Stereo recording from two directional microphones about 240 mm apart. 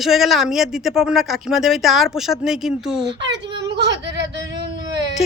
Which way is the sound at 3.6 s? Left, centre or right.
Right.